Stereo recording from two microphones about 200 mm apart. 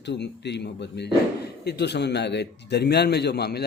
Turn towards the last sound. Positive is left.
turn(degrees=55)  # may be behind; listen again after turning